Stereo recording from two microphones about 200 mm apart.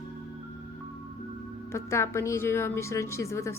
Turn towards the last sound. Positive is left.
turn(degrees=15)  # may be behind; listen again after turning